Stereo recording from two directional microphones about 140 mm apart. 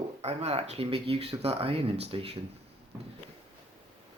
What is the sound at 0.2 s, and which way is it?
A man's voice, 45° right (ahead or behind).